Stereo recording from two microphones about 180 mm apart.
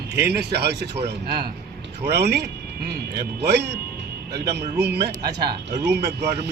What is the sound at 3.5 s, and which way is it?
A man's voice, 65° right (ahead or behind).